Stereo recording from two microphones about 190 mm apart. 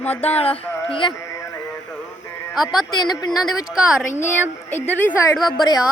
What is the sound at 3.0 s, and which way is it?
Speech, 20° left (ahead or behind).